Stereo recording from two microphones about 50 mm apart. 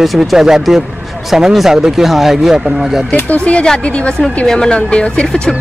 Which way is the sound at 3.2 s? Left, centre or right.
Left.